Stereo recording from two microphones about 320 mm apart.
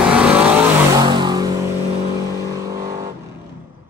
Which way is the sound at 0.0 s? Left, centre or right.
Centre.